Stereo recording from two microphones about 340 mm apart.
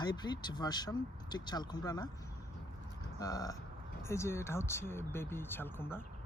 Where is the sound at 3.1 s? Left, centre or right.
Centre.